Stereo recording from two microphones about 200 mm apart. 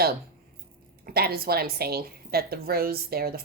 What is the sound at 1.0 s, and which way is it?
A woman's voice, 50° right (ahead or behind).